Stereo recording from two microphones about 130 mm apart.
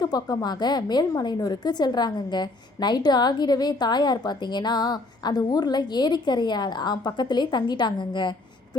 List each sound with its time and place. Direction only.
0.0 s a woman's voice: 30° left (ahead or behind)